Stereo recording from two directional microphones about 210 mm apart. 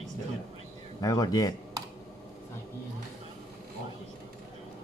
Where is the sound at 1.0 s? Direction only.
15° left (ahead or behind).